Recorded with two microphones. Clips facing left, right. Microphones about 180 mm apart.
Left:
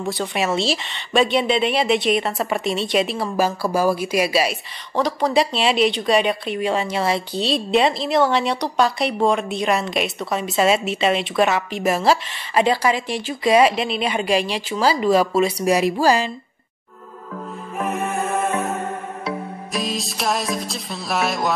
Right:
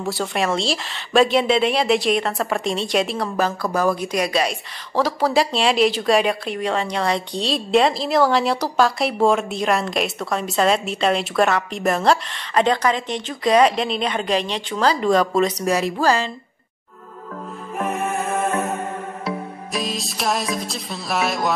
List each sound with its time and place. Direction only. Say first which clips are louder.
0.0 s a woman's voice: even; centre (ahead or behind)
17.7 s music: even; centre (ahead or behind)
19.2 s music: left 1 dB; centre (ahead or behind)